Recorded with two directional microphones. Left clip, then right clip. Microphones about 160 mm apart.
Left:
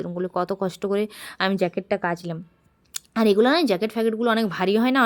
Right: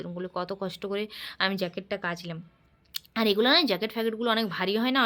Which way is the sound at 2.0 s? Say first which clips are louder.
Left 7 dB; 40° left (ahead or behind).